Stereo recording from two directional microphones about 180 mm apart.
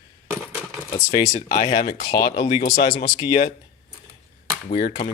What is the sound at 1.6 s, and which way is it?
Speech, 30° left (ahead or behind).